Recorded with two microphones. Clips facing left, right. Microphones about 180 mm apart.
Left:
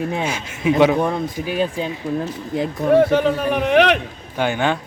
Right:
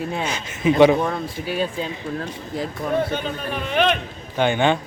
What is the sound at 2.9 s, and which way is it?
A man's voice, 75° left (ahead or behind).